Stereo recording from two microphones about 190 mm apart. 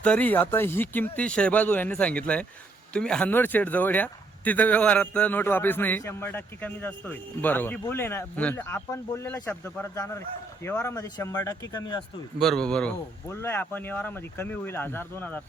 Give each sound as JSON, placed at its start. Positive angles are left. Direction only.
{"t": 0.0, "sound": "speech", "side_deg": 5}
{"t": 12.4, "sound": "speech", "side_deg": 0}